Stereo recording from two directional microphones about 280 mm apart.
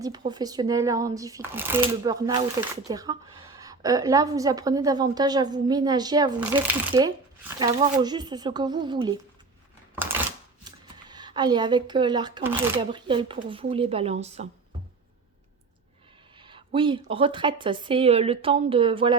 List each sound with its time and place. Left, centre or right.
0.0 s speech: centre
16.4 s a woman's voice: centre